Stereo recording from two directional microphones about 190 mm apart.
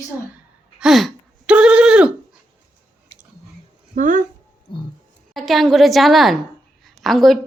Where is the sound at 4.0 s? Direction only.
45° right (ahead or behind).